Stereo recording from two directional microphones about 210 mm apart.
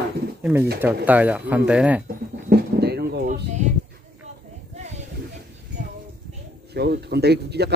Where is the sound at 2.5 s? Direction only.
50° right (ahead or behind).